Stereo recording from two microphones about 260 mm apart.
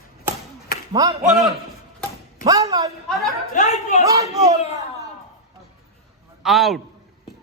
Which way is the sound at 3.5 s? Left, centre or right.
Left.